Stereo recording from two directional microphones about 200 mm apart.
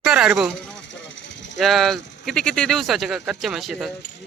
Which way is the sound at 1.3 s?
65° left (ahead or behind).